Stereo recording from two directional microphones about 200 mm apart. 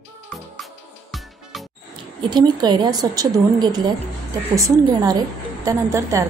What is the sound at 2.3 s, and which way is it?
A woman's voice, 20° right (ahead or behind).